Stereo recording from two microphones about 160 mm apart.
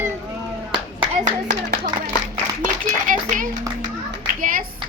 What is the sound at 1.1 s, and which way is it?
A man's voice, 55° right (ahead or behind).